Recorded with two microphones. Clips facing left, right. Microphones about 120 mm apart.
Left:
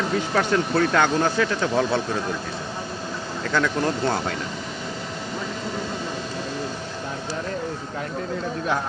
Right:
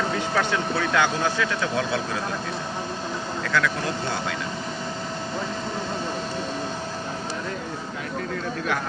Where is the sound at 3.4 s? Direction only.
30° left (ahead or behind).